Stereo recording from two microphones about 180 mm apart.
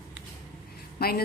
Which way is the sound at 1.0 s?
60° left (ahead or behind).